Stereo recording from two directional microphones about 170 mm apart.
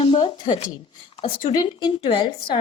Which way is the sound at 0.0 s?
30° left (ahead or behind).